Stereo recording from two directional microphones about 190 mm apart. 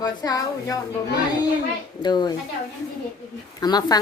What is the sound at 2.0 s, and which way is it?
Speech, 20° left (ahead or behind).